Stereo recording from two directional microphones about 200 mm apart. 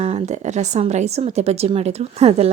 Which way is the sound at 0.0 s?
35° right (ahead or behind).